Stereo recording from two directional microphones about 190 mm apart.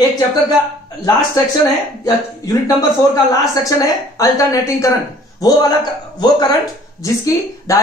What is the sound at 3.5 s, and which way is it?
A woman's voice, 15° left (ahead or behind).